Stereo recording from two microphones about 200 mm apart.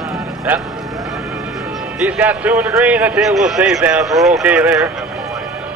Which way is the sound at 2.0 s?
5° right (ahead or behind).